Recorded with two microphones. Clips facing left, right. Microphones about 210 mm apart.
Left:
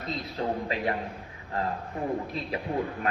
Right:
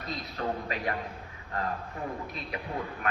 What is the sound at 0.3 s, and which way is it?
Speech, 25° left (ahead or behind).